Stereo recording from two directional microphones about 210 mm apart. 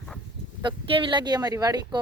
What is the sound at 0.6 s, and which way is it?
Speech, 25° right (ahead or behind).